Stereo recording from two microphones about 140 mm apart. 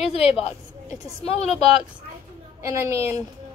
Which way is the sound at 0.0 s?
45° left (ahead or behind).